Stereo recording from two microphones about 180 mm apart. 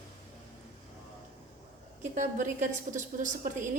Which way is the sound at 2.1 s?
45° right (ahead or behind).